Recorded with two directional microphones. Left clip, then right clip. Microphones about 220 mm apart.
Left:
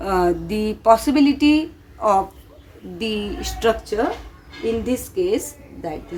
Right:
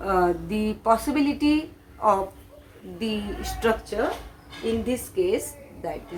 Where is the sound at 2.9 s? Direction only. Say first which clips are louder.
Left 5 dB; 40° left (ahead or behind).